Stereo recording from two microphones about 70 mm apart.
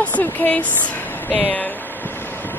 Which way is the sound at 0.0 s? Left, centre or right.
Left.